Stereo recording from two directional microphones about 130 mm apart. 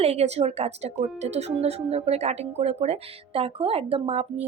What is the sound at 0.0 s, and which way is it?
Speech, 55° right (ahead or behind).